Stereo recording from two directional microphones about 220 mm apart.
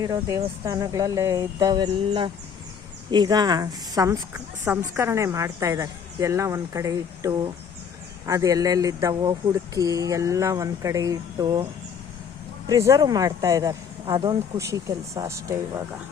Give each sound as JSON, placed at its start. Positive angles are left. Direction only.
{"t": 0.0, "sound": "speech", "side_deg": -15}
{"t": 12.6, "sound": "speech", "side_deg": -15}